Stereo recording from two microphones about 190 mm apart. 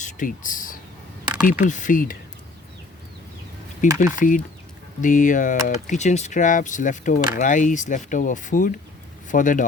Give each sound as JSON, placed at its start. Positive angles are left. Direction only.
{"t": 0.0, "sound": "a sound", "side_deg": 45}
{"t": 1.5, "sound": "speech", "side_deg": 40}
{"t": 3.9, "sound": "speech", "side_deg": 45}